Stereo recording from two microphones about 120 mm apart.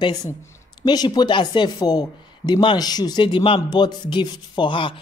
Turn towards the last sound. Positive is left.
turn(degrees=40)  # may be behind; listen again after turning